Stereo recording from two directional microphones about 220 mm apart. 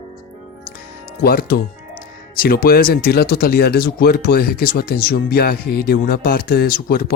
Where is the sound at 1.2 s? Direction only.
45° left (ahead or behind).